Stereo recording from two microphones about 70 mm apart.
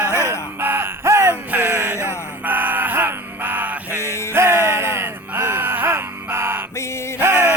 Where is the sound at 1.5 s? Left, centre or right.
Right.